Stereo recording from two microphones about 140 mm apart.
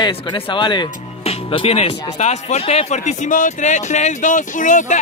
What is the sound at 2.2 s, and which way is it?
Speech, 50° left (ahead or behind).